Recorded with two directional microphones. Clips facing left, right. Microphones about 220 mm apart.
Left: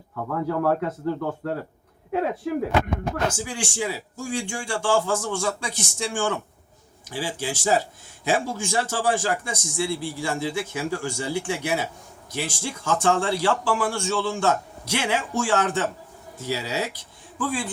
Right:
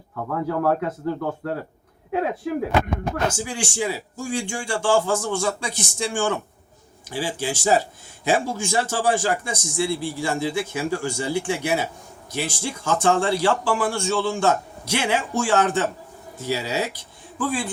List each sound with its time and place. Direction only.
0.2 s speech: 5° right (ahead or behind)
3.4 s a man's voice: 25° right (ahead or behind)